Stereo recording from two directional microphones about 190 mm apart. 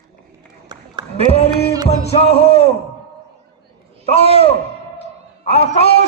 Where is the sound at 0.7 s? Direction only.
25° right (ahead or behind).